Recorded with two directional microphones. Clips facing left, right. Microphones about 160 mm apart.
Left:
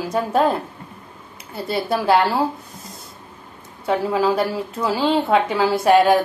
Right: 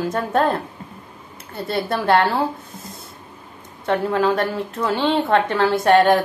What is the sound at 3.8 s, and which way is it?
A woman's voice, 10° left (ahead or behind).